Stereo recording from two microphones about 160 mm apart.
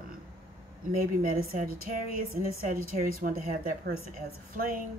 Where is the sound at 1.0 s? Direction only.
65° right (ahead or behind).